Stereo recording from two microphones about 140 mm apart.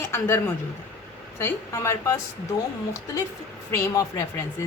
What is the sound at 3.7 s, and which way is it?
Speech, 20° left (ahead or behind).